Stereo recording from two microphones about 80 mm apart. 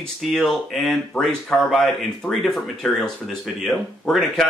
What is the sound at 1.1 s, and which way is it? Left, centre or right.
Speech, centre.